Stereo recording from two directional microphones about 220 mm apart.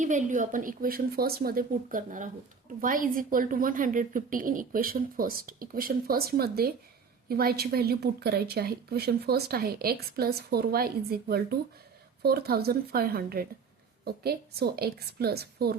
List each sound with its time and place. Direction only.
0.0 s a woman's voice: 35° right (ahead or behind)